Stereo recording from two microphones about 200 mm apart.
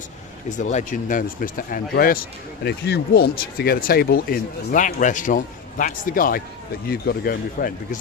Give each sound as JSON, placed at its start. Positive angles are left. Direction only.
{"t": 0.5, "sound": "speech", "side_deg": 35}